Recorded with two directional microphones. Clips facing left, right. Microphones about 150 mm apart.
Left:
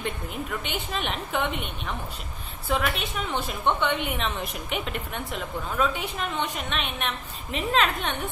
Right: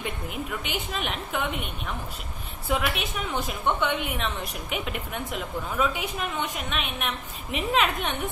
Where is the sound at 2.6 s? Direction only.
10° right (ahead or behind).